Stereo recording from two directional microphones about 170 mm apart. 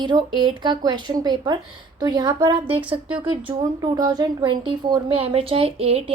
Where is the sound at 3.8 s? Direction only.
25° right (ahead or behind).